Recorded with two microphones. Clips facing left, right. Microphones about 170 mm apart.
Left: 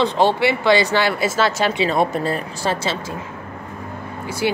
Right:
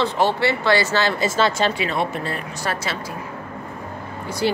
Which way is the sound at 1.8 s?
40° left (ahead or behind).